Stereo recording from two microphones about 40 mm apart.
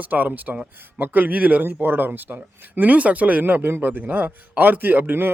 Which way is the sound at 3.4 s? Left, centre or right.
Right.